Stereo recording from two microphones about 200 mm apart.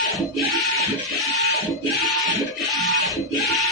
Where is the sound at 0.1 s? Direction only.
Centre (ahead or behind).